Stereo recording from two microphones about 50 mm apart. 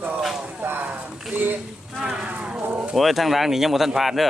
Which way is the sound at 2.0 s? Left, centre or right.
Centre.